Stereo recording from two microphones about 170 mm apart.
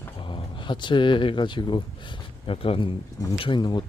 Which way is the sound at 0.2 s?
30° left (ahead or behind).